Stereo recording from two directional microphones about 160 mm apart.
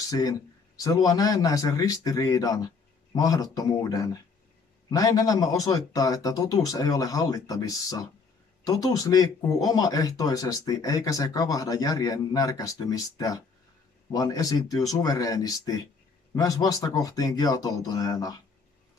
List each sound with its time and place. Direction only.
0.1 s speech: 20° left (ahead or behind)